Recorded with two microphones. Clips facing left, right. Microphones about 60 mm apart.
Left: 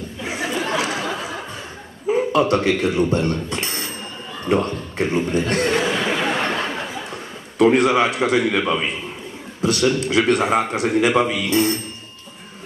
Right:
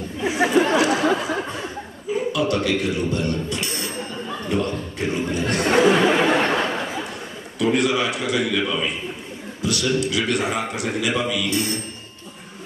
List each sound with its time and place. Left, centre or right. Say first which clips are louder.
0.7 s chatter: right 4 dB; right
2.0 s a man's voice: left 5 dB; left
5.6 s speech: right 8 dB; right
6.0 s a sound: right 3 dB; right
7.5 s a man's voice: left 5 dB; left